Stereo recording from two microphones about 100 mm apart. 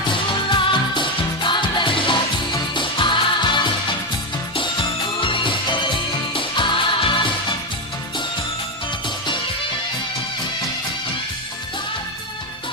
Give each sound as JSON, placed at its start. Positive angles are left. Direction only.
{"t": 0.1, "sound": "music", "side_deg": 55}
{"t": 5.2, "sound": "music", "side_deg": 55}
{"t": 9.0, "sound": "music", "side_deg": 50}